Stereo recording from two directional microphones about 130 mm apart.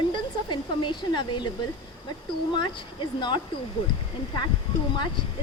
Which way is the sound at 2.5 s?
35° left (ahead or behind).